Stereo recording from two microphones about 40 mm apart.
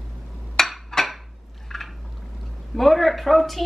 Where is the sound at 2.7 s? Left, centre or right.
Centre.